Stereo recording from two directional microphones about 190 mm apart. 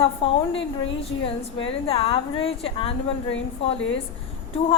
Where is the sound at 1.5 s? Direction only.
30° left (ahead or behind).